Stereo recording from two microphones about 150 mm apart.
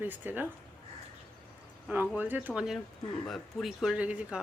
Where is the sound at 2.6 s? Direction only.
Centre (ahead or behind).